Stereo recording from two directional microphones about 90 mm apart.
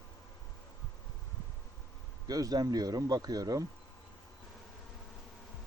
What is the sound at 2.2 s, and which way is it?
Speech, 45° right (ahead or behind).